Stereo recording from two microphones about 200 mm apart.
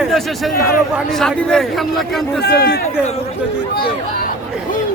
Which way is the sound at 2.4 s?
55° left (ahead or behind).